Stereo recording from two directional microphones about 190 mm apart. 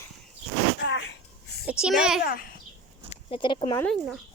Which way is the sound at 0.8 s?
65° left (ahead or behind).